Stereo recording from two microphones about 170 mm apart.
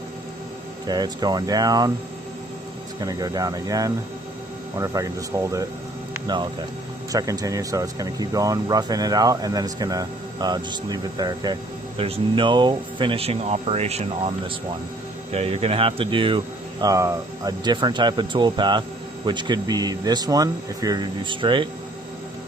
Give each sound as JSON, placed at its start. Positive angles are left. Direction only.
{"t": 0.9, "sound": "speech", "side_deg": -25}
{"t": 3.0, "sound": "speech", "side_deg": -20}
{"t": 7.1, "sound": "speech", "side_deg": -20}
{"t": 16.8, "sound": "speech", "side_deg": -20}